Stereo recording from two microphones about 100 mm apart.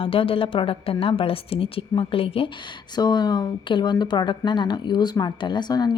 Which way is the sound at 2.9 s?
45° left (ahead or behind).